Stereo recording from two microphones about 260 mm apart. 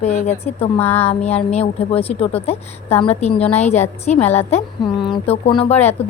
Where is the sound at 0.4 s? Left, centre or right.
Left.